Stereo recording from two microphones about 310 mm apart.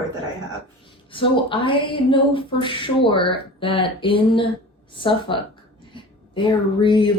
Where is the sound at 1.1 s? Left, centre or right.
Centre.